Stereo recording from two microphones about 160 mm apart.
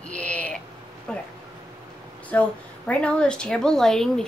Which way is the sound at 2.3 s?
10° left (ahead or behind).